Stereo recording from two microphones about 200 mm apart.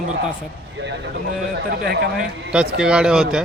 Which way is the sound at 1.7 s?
55° right (ahead or behind).